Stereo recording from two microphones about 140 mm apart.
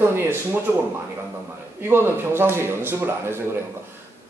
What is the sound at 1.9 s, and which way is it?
A man's voice, 15° right (ahead or behind).